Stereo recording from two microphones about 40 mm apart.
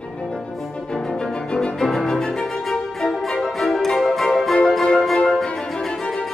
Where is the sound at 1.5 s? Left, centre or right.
Centre.